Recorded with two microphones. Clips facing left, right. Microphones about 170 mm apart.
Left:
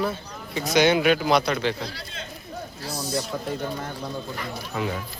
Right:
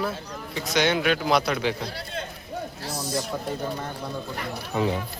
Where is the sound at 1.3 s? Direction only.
5° right (ahead or behind).